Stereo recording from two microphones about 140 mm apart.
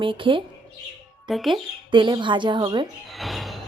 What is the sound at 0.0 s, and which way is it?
Speech, 35° right (ahead or behind).